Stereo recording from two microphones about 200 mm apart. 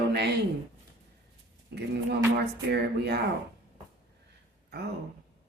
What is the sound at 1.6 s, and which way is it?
A man's voice, 55° right (ahead or behind).